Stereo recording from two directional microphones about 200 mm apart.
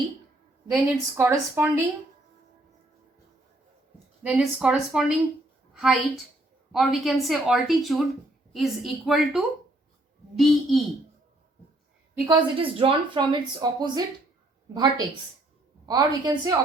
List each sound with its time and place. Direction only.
0.7 s speech: 10° right (ahead or behind)
4.2 s a woman's voice: 5° right (ahead or behind)
12.3 s speech: 25° right (ahead or behind)